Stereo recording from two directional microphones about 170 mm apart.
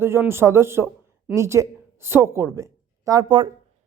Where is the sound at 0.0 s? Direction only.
15° right (ahead or behind).